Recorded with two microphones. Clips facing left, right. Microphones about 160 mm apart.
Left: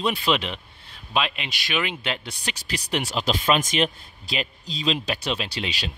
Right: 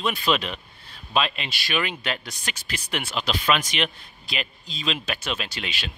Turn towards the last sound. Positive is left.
turn(degrees=35)  # may be behind; listen again after turning